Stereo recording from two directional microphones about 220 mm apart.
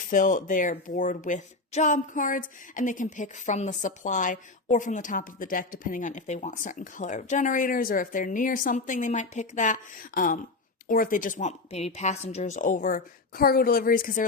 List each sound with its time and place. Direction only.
0.1 s speech: 35° left (ahead or behind)